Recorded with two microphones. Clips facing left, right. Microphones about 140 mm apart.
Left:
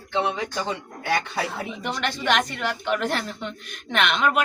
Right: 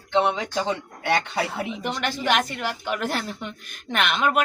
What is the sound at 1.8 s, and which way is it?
A woman's voice, 5° right (ahead or behind).